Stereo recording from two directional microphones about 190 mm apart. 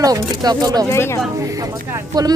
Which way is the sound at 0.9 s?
15° left (ahead or behind).